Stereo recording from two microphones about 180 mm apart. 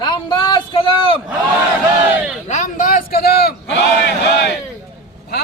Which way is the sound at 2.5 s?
45° left (ahead or behind).